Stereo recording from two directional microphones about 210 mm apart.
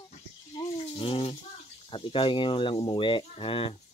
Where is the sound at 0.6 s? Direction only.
25° left (ahead or behind).